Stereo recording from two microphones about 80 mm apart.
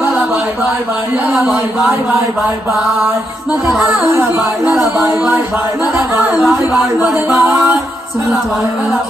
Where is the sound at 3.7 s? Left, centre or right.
Centre.